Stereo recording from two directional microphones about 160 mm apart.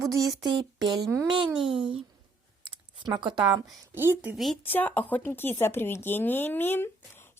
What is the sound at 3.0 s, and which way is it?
Speech, 30° right (ahead or behind).